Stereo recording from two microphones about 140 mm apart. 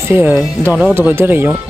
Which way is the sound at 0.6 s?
10° right (ahead or behind).